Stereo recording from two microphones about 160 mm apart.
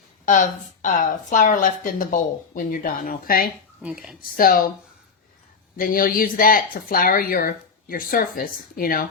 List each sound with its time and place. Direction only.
0.3 s a woman's voice: 50° left (ahead or behind)
3.8 s speech: 5° right (ahead or behind)
4.2 s a woman's voice: 65° left (ahead or behind)
5.7 s a woman's voice: 60° left (ahead or behind)